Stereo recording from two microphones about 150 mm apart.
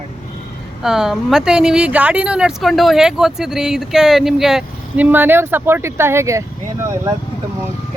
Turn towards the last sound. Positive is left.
turn(degrees=-20)  # may be behind; listen again after turning